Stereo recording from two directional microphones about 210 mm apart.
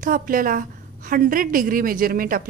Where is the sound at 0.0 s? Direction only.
40° right (ahead or behind).